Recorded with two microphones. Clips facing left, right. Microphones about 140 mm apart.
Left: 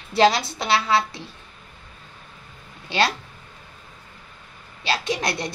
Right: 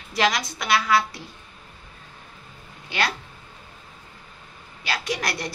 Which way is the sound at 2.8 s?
30° left (ahead or behind).